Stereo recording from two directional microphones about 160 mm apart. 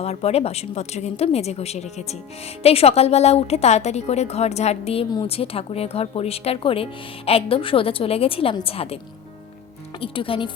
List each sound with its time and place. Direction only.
0.0 s a woman's voice: 40° left (ahead or behind)
10.0 s a woman's voice: 35° left (ahead or behind)